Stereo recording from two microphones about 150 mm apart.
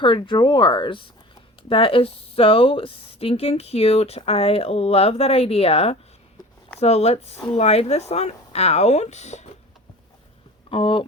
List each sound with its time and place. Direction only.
0.0 s a woman's voice: 35° left (ahead or behind); by 9.5 s 50° left (ahead or behind)
10.7 s a woman's voice: 35° left (ahead or behind)